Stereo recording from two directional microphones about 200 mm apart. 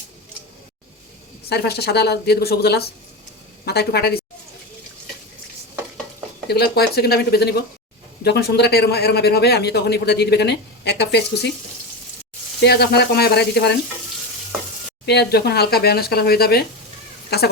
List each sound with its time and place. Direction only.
1.5 s speech: 55° left (ahead or behind)
6.5 s a man's voice: 55° left (ahead or behind)
12.6 s a man's voice: 55° left (ahead or behind)
15.0 s speech: 55° left (ahead or behind)